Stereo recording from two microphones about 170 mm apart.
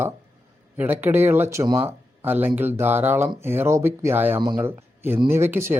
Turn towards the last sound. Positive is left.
turn(degrees=-15)  # may be behind; listen again after turning